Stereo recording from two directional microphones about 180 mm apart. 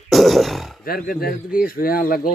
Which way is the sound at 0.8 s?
55° left (ahead or behind).